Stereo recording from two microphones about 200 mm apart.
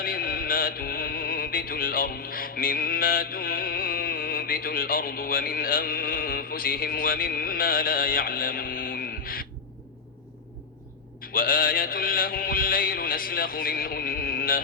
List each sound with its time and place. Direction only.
0.0 s music: 45° left (ahead or behind)
11.2 s mantra: 45° left (ahead or behind)